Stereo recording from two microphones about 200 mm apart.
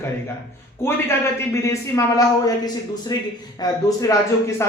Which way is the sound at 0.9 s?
15° left (ahead or behind).